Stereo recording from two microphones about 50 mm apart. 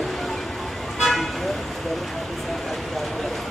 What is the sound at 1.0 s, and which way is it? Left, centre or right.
Vehicle, centre.